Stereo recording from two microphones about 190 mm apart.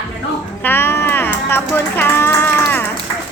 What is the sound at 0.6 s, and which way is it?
Music, 10° left (ahead or behind).